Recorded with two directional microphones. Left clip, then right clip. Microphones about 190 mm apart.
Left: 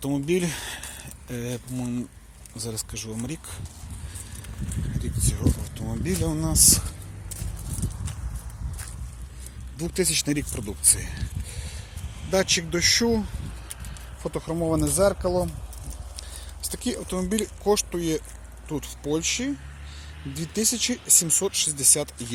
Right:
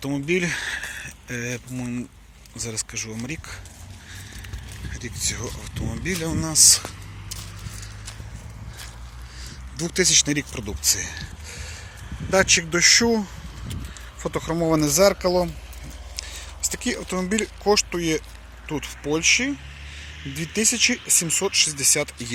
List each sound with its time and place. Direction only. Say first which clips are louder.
0.0 s speech: right 2 dB; 20° left (ahead or behind)
4.9 s speech: right 5 dB; 15° left (ahead or behind)
9.7 s speech: right 6 dB; centre (ahead or behind)
12.3 s speech: right 5 dB; 10° left (ahead or behind)
16.1 s a sound: right 9 dB; 10° left (ahead or behind)
17.7 s speech: right 3 dB; 10° left (ahead or behind)